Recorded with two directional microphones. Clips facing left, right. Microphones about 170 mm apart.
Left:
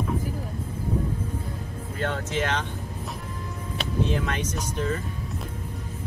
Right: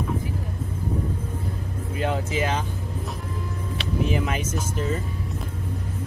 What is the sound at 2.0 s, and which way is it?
Speech, 5° right (ahead or behind).